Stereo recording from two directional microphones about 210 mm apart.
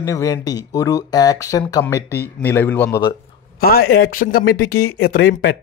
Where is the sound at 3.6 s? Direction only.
45° left (ahead or behind).